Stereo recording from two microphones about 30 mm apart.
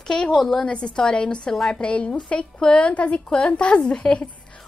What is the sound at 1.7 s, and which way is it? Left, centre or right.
A woman's voice, left.